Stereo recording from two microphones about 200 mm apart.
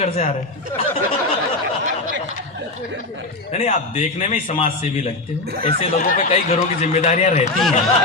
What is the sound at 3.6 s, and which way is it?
A man's voice, 30° left (ahead or behind).